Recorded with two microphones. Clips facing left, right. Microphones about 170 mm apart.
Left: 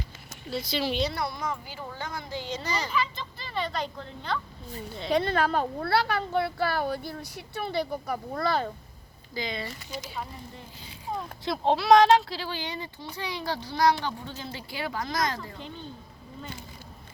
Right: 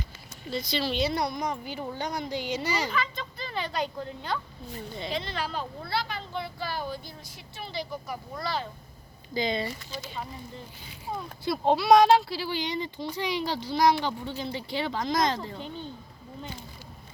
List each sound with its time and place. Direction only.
0.5 s speech: 5° left (ahead or behind)
1.1 s speech: 20° right (ahead or behind)
2.9 s speech: centre (ahead or behind)
5.1 s speech: 55° left (ahead or behind)
9.3 s speech: 25° right (ahead or behind)
11.4 s speech: 5° right (ahead or behind); by 15.5 s 25° right (ahead or behind)